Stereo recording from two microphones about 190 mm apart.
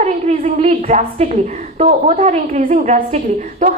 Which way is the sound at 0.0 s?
35° right (ahead or behind).